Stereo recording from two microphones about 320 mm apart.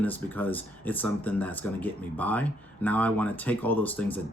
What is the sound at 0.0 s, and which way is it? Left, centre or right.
Speech, centre.